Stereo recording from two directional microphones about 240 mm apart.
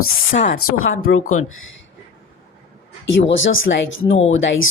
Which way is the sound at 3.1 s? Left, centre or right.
Left.